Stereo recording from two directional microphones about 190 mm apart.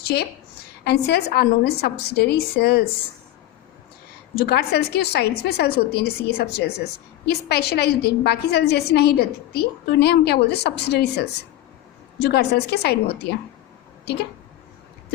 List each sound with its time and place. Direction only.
0.0 s a woman's voice: 55° left (ahead or behind)
4.4 s a woman's voice: 55° left (ahead or behind)